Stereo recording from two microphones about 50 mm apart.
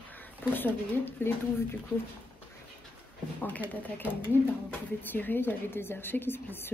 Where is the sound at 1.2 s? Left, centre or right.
Left.